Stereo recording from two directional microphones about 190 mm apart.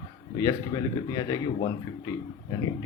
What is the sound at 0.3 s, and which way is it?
A man's voice, 20° left (ahead or behind).